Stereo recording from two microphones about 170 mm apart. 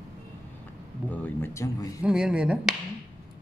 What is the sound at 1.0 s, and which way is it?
Speech, 15° left (ahead or behind).